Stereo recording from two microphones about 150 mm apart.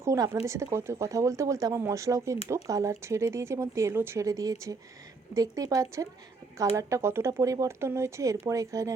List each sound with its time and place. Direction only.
0.0 s speech: 20° right (ahead or behind)